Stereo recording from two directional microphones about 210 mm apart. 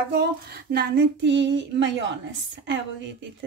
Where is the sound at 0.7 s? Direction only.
55° right (ahead or behind).